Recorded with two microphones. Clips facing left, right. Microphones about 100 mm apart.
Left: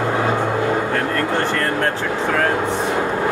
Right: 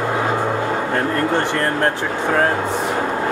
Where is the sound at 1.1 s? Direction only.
20° right (ahead or behind).